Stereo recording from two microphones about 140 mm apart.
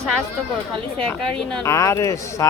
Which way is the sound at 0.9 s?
10° left (ahead or behind).